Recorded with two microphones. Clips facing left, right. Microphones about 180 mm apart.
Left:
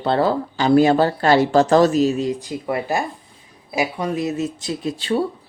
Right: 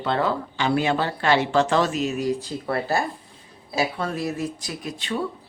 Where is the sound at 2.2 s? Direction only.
20° left (ahead or behind).